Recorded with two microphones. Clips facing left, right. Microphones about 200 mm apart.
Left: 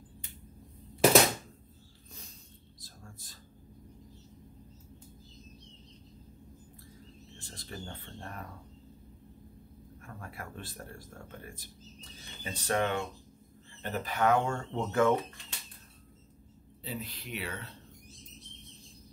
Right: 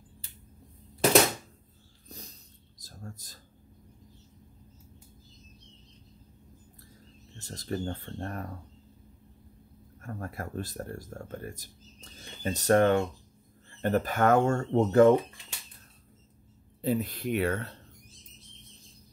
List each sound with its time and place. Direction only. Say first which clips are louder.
2.0 s dog: right 7 dB; 40° right (ahead or behind)
2.8 s a sound: right 8 dB; 40° right (ahead or behind)
7.3 s speech: right 11 dB; 40° right (ahead or behind)
10.0 s speech: right 7 dB; 40° right (ahead or behind)
16.8 s speech: right 12 dB; 50° right (ahead or behind)